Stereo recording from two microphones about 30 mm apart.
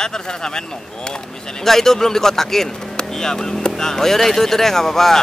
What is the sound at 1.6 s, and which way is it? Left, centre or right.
Speech, centre.